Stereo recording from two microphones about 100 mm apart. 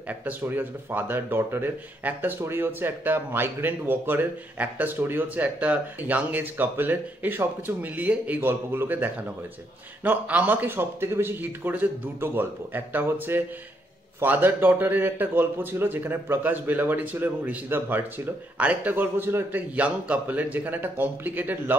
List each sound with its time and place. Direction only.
0.1 s speech: 15° right (ahead or behind)